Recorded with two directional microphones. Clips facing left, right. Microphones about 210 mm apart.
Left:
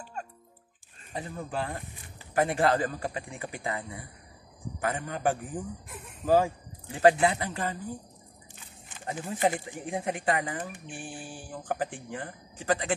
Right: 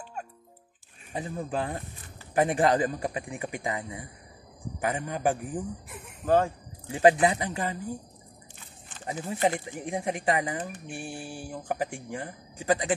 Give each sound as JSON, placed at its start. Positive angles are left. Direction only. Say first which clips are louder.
{"t": 1.1, "sound": "speech", "louder": "right 3 dB", "side_deg": -15}
{"t": 6.2, "sound": "speech", "louder": "even", "side_deg": 5}
{"t": 6.9, "sound": "speech", "louder": "right 1 dB", "side_deg": -15}
{"t": 9.0, "sound": "speech", "louder": "right 1 dB", "side_deg": -10}